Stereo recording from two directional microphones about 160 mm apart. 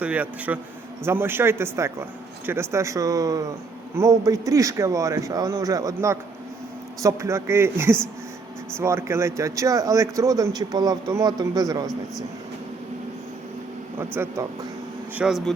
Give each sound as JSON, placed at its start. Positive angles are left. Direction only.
{"t": 0.0, "sound": "a man's voice", "side_deg": -10}
{"t": 14.2, "sound": "a man's voice", "side_deg": -15}
{"t": 15.1, "sound": "speech", "side_deg": -5}